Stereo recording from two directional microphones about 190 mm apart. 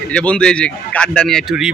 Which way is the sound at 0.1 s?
5° left (ahead or behind).